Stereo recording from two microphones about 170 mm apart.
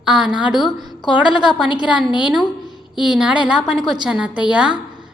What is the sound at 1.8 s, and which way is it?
A woman's voice, 5° right (ahead or behind).